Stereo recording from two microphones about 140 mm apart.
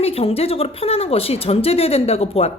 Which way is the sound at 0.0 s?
45° left (ahead or behind).